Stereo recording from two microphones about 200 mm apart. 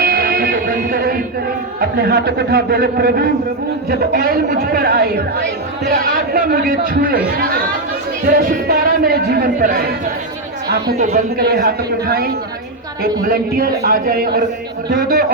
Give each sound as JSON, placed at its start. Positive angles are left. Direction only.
{"t": 0.0, "sound": "music", "side_deg": -50}
{"t": 1.8, "sound": "speech", "side_deg": -50}
{"t": 11.3, "sound": "speech", "side_deg": -55}